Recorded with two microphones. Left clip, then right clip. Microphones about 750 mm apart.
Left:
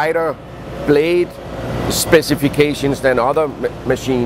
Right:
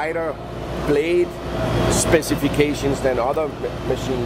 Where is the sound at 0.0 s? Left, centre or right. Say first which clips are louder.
Left 7 dB; left.